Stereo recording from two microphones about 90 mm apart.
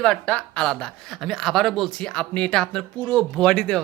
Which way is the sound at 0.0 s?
10° left (ahead or behind).